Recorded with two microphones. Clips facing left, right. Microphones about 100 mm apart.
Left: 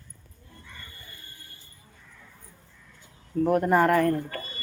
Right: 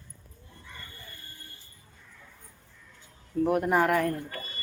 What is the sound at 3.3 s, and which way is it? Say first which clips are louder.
Speech: left 3 dB; 5° right (ahead or behind).